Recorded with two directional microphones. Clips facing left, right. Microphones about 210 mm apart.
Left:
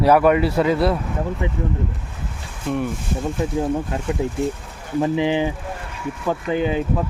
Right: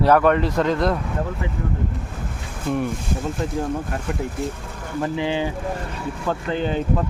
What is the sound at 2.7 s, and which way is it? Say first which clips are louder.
Speech: even; centre (ahead or behind).